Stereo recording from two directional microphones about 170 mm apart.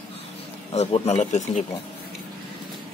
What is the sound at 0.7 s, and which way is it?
Speech, 40° left (ahead or behind).